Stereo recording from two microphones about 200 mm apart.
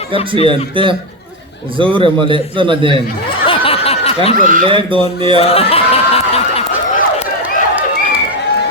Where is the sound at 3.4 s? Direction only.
25° left (ahead or behind).